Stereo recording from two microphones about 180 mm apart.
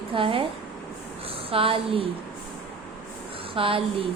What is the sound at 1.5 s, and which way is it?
Speech, 30° right (ahead or behind).